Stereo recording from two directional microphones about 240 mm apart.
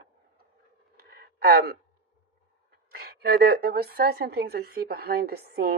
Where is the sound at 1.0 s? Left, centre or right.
Right.